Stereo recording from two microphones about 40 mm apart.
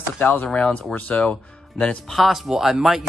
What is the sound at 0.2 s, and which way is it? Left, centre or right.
Speech, left.